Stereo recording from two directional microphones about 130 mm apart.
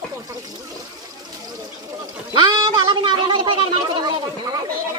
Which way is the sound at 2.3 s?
35° right (ahead or behind).